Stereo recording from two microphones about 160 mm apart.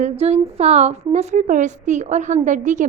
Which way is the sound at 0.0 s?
40° right (ahead or behind).